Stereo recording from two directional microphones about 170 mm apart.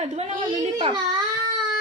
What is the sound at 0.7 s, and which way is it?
Speech, 25° right (ahead or behind).